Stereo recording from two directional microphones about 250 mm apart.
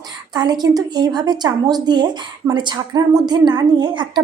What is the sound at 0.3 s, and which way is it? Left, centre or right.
A child's voice, centre.